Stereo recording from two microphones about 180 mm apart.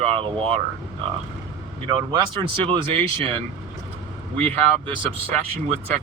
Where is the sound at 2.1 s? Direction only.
30° right (ahead or behind).